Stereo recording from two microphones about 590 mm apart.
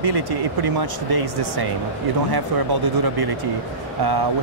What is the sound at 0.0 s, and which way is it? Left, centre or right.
Speech, right.